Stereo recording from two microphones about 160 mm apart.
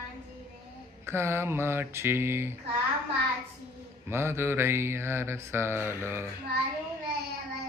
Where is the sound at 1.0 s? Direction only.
15° right (ahead or behind).